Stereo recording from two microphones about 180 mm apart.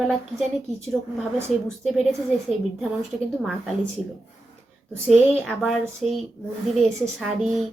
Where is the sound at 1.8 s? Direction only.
Centre (ahead or behind).